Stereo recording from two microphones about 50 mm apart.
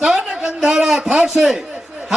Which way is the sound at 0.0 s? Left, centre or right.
Centre.